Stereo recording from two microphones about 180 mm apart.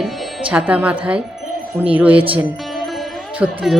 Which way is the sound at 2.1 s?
30° right (ahead or behind).